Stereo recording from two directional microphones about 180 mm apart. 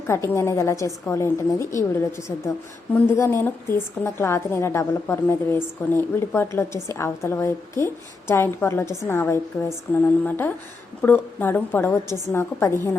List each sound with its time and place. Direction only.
0.1 s a woman's voice: 15° left (ahead or behind)